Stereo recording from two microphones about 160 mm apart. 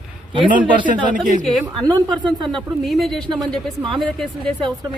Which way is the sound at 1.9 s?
25° right (ahead or behind).